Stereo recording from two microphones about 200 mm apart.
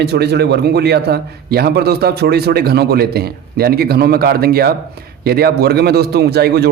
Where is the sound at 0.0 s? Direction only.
55° right (ahead or behind).